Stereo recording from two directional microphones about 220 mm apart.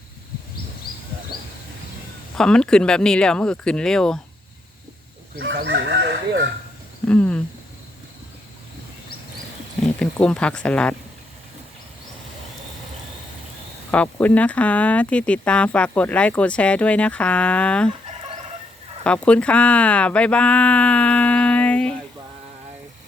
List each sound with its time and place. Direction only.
2.3 s speech: 5° left (ahead or behind)
5.5 s speech: 50° right (ahead or behind)
7.1 s a sound: 5° left (ahead or behind)
9.8 s speech: 5° left (ahead or behind)
13.9 s speech: 5° left (ahead or behind)
19.0 s speech: 5° left (ahead or behind)